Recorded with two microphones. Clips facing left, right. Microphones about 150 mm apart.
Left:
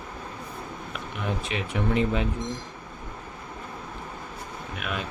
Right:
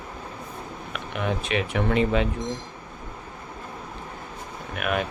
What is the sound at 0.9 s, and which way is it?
Speech, 70° right (ahead or behind).